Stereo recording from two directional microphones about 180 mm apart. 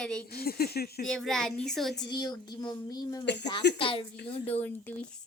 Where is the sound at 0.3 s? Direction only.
60° left (ahead or behind).